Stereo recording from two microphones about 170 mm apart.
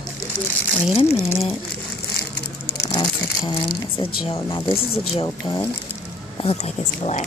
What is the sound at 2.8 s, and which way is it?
Speech, 25° left (ahead or behind).